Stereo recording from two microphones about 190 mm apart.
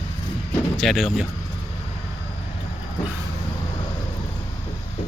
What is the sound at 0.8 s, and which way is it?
Speech, centre (ahead or behind).